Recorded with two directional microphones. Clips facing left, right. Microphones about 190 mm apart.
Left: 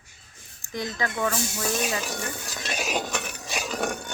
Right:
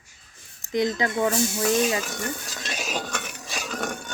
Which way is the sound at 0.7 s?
20° right (ahead or behind).